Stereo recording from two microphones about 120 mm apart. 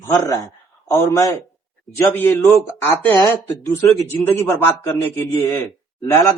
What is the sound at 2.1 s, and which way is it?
Speech, 20° left (ahead or behind).